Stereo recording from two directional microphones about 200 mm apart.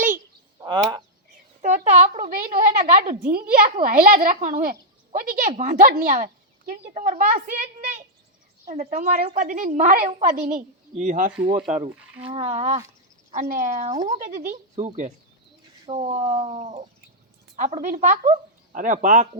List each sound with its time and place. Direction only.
0.6 s fowl: 20° right (ahead or behind)
1.6 s a sound: 35° right (ahead or behind)
2.6 s a child's voice: 45° right (ahead or behind)
11.4 s a woman's voice: 25° right (ahead or behind)